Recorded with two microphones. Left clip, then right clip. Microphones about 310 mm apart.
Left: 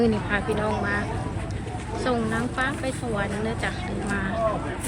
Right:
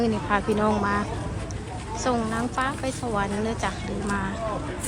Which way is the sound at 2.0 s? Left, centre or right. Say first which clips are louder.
Even; centre.